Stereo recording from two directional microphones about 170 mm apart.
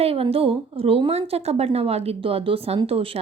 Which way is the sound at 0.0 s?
35° right (ahead or behind).